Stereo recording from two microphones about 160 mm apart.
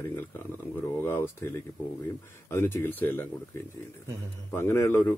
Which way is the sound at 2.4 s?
15° left (ahead or behind).